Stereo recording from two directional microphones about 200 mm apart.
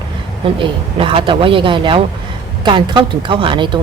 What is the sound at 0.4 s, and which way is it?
Speech, 25° right (ahead or behind).